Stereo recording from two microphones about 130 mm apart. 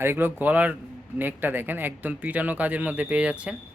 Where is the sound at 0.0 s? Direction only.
15° right (ahead or behind).